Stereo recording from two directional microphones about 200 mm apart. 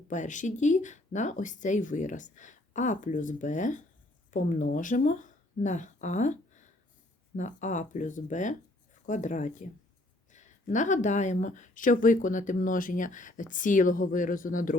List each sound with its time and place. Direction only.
0.1 s speech: 40° left (ahead or behind)